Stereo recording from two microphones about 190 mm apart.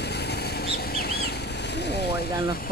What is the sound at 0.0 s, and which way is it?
Vehicle, 60° left (ahead or behind).